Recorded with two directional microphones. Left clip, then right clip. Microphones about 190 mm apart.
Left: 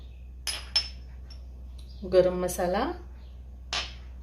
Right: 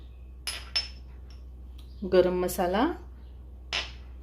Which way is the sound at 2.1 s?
35° right (ahead or behind).